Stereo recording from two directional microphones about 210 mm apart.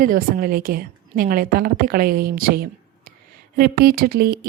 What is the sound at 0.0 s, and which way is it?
A woman's voice, 45° right (ahead or behind).